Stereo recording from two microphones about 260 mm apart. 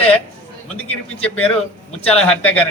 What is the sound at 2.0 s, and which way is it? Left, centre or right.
Speech, left.